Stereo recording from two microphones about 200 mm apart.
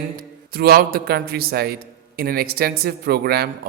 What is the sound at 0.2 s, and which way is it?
Speech, 50° right (ahead or behind).